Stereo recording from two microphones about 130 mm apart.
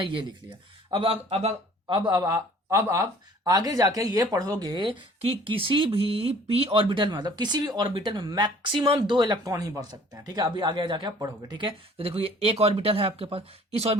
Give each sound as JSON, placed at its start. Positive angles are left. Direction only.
{"t": 0.0, "sound": "speech", "side_deg": -40}